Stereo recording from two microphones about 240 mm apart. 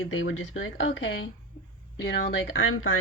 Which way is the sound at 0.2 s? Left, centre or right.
Left.